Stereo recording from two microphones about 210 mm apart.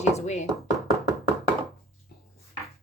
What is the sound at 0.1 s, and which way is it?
Speech, 35° left (ahead or behind).